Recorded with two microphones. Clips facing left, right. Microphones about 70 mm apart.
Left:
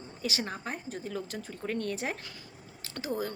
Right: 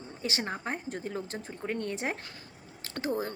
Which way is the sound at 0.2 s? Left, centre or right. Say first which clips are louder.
Right 1 dB; right.